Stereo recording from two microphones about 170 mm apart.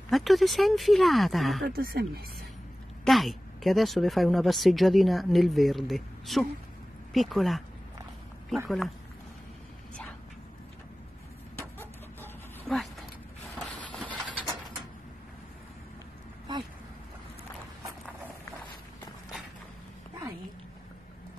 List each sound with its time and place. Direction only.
0.1 s speech: centre (ahead or behind)
1.7 s speech: 65° right (ahead or behind)
3.1 s speech: centre (ahead or behind)
8.6 s speech: centre (ahead or behind)
12.6 s a sound: centre (ahead or behind)
14.0 s vehicle: 5° right (ahead or behind)
16.5 s a sound: 25° right (ahead or behind)